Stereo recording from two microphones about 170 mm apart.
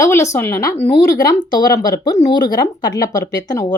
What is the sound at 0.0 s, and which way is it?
Speech, 15° left (ahead or behind).